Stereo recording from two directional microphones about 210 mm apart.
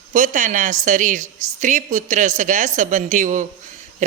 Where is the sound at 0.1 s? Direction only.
35° right (ahead or behind).